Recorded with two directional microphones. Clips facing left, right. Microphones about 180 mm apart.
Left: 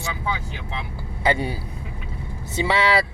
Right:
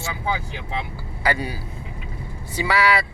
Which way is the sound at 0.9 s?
25° left (ahead or behind).